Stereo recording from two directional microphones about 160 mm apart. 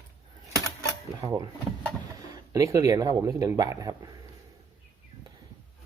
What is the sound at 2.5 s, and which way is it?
Speech, 20° right (ahead or behind).